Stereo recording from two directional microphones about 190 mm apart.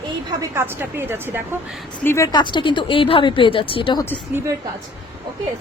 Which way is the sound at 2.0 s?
15° left (ahead or behind).